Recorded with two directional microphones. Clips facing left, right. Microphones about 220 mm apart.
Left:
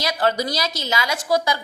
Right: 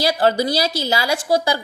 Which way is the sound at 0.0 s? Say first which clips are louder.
Right 4 dB; 30° right (ahead or behind).